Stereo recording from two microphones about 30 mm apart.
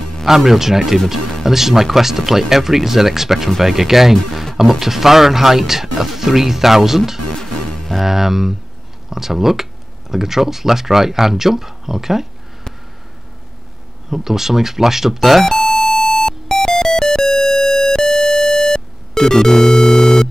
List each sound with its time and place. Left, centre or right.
0.5 s speech: centre
7.2 s music: centre
8.0 s speech: centre
14.1 s speech: centre
16.3 s music: centre
17.6 s music: centre